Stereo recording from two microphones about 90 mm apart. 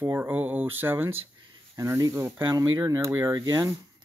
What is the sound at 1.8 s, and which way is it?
Speech, 40° right (ahead or behind).